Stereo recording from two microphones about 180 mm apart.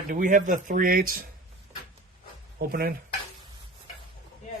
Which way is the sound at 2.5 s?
55° right (ahead or behind).